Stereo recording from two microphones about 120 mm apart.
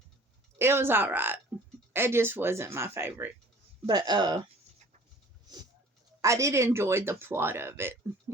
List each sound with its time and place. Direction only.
0.6 s speech: 20° right (ahead or behind)
3.8 s speech: 35° right (ahead or behind)
5.5 s a sound: 35° right (ahead or behind)
6.2 s speech: 25° right (ahead or behind)